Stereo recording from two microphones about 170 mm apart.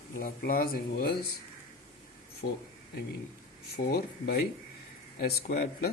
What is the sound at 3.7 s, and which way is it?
Speech, 65° left (ahead or behind).